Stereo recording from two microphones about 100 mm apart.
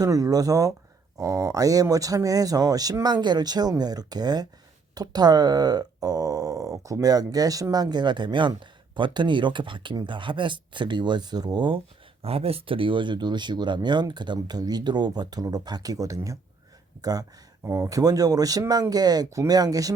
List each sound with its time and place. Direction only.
0.0 s speech: 35° right (ahead or behind)
12.2 s speech: 85° right; by 19.9 s 40° right (ahead or behind)